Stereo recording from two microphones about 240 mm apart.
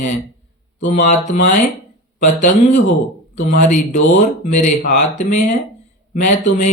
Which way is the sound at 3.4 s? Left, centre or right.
Left.